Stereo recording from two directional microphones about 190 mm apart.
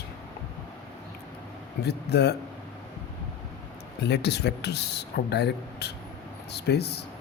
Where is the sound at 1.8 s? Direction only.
60° left (ahead or behind).